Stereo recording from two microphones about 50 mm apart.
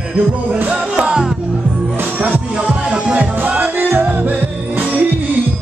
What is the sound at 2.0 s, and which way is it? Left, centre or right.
Music, right.